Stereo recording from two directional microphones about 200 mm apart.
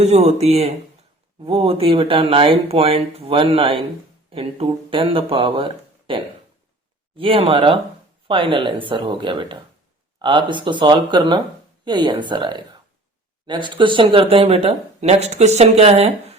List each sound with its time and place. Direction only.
0.0 s speech: 35° right (ahead or behind)